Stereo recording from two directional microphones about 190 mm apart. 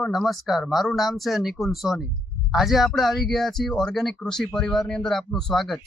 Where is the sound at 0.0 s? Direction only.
Centre (ahead or behind).